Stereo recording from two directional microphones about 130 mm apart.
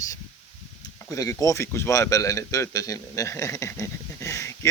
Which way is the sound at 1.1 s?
25° left (ahead or behind).